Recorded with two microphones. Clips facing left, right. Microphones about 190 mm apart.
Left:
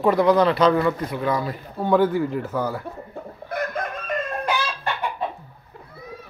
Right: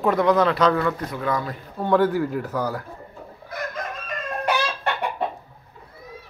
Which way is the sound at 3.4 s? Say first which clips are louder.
Left 5 dB; 55° left (ahead or behind).